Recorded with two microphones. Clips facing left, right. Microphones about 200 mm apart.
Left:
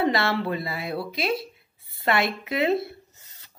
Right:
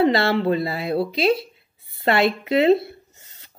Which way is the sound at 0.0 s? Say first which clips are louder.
Right 5 dB; 25° right (ahead or behind).